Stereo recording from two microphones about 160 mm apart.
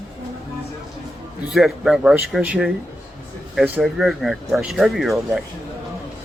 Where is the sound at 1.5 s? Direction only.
Centre (ahead or behind).